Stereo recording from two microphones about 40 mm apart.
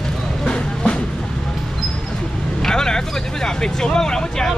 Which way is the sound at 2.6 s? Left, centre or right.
Centre.